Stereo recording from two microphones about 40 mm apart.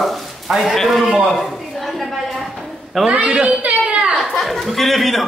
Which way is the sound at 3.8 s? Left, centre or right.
Right.